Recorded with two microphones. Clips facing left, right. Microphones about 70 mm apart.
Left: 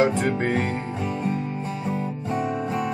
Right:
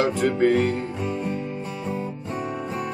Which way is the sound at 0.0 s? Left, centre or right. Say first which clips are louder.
Right 1 dB; left.